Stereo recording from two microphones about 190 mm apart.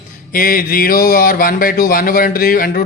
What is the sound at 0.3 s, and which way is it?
Speech, 50° left (ahead or behind).